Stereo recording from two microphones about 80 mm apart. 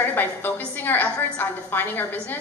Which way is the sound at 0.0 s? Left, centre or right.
Left.